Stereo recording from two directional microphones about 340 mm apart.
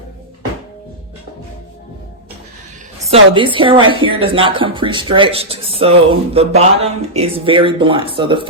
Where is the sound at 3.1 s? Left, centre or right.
Centre.